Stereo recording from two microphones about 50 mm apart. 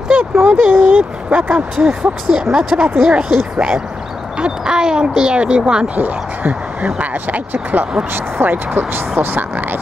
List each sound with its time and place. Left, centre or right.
0.1 s speech: centre
5.9 s speech: right